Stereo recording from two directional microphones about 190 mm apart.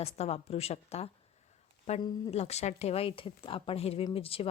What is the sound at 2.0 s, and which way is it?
Speech, 20° left (ahead or behind).